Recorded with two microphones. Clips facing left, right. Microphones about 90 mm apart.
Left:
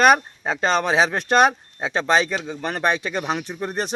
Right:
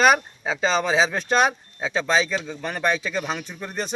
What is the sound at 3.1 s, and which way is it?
Speech, 15° left (ahead or behind).